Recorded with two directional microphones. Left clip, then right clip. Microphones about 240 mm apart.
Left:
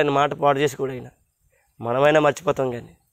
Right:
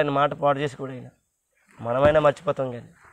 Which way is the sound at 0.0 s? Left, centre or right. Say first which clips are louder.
Left 3 dB; left.